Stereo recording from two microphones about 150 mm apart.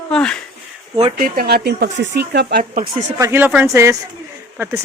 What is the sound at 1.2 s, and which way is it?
Speech, 80° right.